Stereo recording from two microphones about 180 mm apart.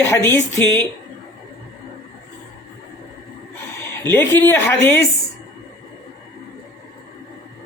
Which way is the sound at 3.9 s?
10° left (ahead or behind).